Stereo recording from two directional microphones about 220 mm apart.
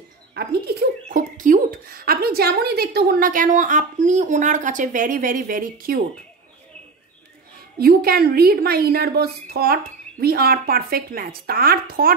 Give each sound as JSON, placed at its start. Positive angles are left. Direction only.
{"t": 0.3, "sound": "a sound", "side_deg": -45}
{"t": 1.1, "sound": "speech", "side_deg": -35}
{"t": 7.8, "sound": "a woman's voice", "side_deg": -45}